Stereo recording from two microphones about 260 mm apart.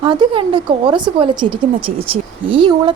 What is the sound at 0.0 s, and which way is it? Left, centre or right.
A woman's voice, centre.